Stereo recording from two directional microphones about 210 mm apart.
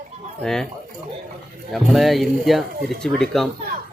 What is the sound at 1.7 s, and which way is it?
Speech, centre (ahead or behind).